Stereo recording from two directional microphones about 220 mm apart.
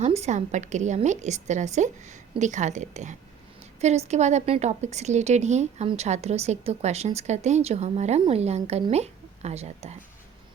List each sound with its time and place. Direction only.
0.0 s a woman's voice: 30° right (ahead or behind)